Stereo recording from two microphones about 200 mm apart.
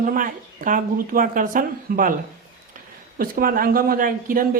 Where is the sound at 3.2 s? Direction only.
45° right (ahead or behind).